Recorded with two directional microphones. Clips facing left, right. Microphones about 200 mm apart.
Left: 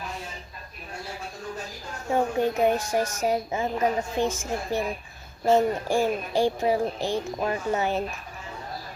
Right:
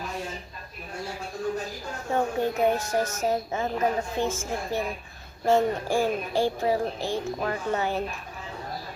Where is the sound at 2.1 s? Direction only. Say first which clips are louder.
Left 2 dB; 15° left (ahead or behind).